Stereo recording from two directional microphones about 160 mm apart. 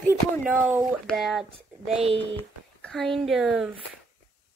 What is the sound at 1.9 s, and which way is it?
Speech, 40° right (ahead or behind).